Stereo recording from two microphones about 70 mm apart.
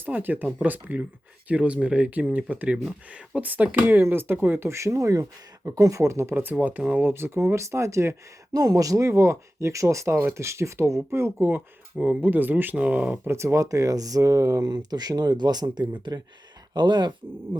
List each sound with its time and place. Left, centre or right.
0.0 s speech: right
6.3 s speech: right
8.5 s speech: right
11.9 s speech: centre
13.2 s speech: right